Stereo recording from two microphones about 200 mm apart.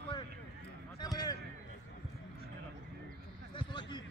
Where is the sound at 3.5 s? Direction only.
25° left (ahead or behind).